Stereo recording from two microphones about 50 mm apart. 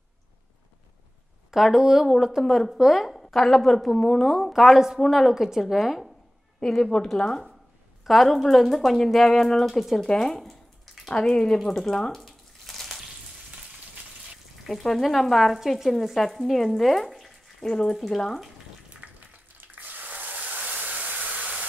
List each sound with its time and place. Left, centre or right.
1.5 s a woman's voice: centre
6.8 s speech: centre
8.0 s speech: centre
12.2 s water: centre
14.7 s speech: centre
17.6 s speech: centre
19.1 s a sound: right